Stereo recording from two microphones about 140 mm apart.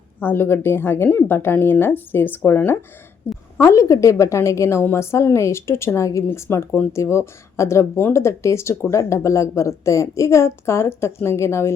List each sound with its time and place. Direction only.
0.2 s speech: 15° left (ahead or behind)
3.3 s a sound: 15° left (ahead or behind)
3.6 s a woman's voice: 20° left (ahead or behind)